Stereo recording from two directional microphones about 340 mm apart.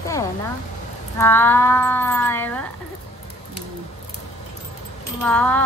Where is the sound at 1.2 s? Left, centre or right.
Centre.